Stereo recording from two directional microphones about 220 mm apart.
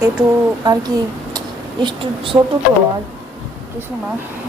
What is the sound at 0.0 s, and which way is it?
A woman's voice, 15° right (ahead or behind).